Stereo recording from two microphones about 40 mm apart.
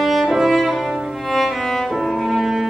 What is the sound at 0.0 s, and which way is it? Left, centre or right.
Music, centre.